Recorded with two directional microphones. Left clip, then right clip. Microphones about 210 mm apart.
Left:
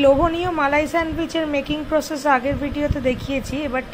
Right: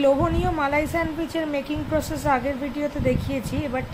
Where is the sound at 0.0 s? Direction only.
15° left (ahead or behind).